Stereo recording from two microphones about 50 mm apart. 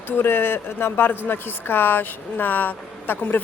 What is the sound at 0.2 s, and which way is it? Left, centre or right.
Speech, left.